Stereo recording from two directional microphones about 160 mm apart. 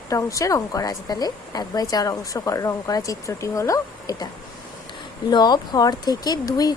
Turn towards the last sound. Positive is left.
turn(degrees=25)  # may be behind; listen again after turning